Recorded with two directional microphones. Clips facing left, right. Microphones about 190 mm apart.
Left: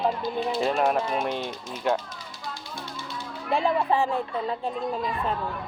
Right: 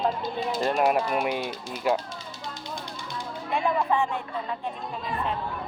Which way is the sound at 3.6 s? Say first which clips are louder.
Left 1 dB; 35° left (ahead or behind).